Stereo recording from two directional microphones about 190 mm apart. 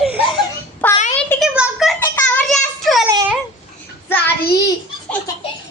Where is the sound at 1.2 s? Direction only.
5° left (ahead or behind).